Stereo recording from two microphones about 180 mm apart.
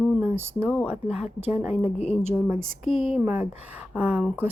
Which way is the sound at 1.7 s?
35° left (ahead or behind).